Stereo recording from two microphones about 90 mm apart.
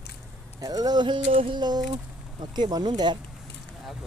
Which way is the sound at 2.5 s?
50° right (ahead or behind).